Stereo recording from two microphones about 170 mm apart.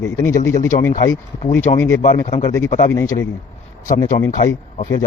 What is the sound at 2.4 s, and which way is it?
Speech, 20° left (ahead or behind).